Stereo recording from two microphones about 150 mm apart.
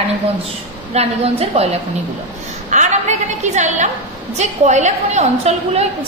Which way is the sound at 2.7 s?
50° right (ahead or behind).